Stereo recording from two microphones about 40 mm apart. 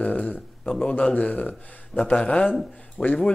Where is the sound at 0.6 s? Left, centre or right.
Left.